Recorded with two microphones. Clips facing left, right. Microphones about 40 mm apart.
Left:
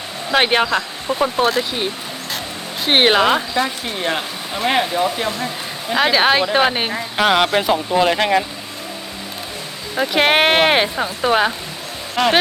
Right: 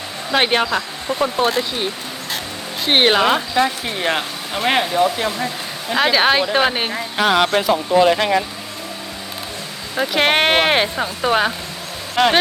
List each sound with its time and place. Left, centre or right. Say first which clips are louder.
0.3 s speech: left 1 dB; centre
7.3 s speech: even; centre
9.9 s speech: left 1 dB; centre